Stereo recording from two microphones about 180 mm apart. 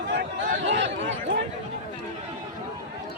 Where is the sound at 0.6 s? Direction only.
85° right.